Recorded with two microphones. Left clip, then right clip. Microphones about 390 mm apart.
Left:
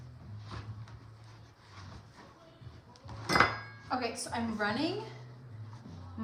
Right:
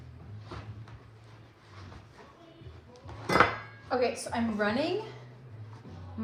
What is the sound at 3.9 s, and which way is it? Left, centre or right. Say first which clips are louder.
Speech: right 6 dB; centre.